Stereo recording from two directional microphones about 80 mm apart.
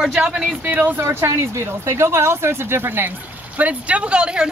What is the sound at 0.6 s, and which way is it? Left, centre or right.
Speech, right.